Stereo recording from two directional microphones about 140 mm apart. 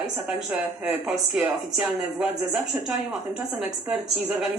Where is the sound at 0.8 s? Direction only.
15° right (ahead or behind).